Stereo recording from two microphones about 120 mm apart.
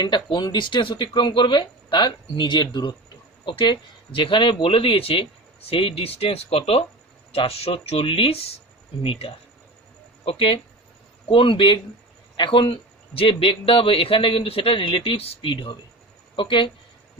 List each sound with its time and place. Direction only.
0.0 s speech: 40° left (ahead or behind)